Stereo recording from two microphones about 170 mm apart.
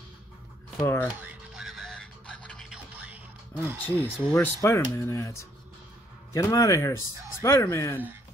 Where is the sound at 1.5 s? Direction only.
Centre (ahead or behind).